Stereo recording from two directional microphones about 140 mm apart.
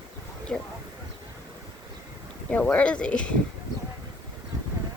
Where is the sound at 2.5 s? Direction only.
10° left (ahead or behind).